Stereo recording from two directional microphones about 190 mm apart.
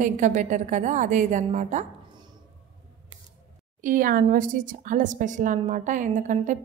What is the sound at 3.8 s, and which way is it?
A woman's voice, 45° right (ahead or behind).